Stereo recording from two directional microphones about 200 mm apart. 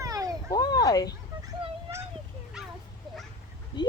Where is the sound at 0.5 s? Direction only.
20° left (ahead or behind).